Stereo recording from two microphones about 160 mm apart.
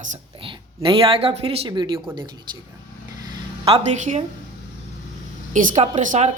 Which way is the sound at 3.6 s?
35° right (ahead or behind).